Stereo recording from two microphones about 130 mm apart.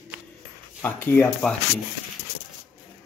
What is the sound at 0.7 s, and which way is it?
Speech, 15° left (ahead or behind).